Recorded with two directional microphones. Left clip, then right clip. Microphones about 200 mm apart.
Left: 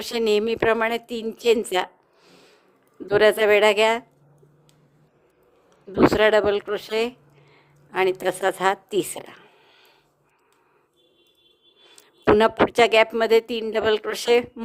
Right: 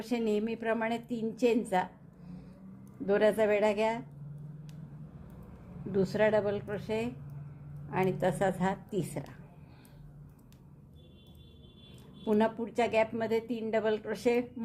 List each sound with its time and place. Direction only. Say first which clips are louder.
0.0 s a woman's voice: left 11 dB; 45° left (ahead or behind)
6.1 s a woman's voice: left 6 dB; 45° left (ahead or behind)
12.4 s a woman's voice: left 11 dB; 45° left (ahead or behind)